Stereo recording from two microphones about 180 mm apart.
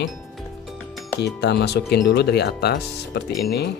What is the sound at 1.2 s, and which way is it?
Speech, 70° left (ahead or behind).